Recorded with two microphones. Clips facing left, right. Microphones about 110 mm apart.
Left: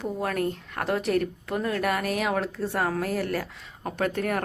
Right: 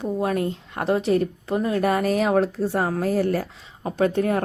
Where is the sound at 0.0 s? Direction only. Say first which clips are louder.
Right 4 dB; 20° right (ahead or behind).